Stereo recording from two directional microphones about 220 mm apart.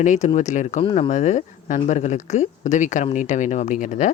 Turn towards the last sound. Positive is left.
turn(degrees=35)  # may be behind; listen again after turning